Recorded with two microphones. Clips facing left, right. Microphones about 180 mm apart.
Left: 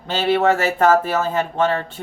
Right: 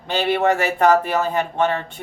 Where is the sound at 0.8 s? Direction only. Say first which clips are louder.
Even; 15° right (ahead or behind).